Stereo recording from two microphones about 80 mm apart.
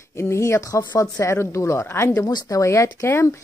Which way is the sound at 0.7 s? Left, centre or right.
Left.